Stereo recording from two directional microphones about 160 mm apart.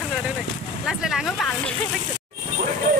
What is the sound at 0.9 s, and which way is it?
Speech, centre (ahead or behind).